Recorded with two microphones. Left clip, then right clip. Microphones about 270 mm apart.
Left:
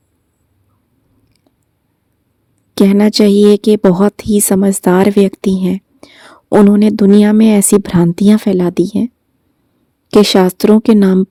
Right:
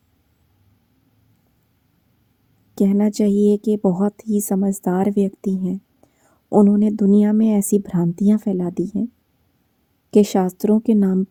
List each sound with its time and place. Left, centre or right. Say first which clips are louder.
2.7 s a woman's voice: left 9 dB; left
10.1 s speech: left 8 dB; left